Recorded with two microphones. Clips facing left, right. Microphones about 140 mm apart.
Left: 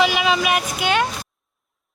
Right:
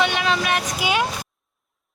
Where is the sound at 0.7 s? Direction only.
5° right (ahead or behind).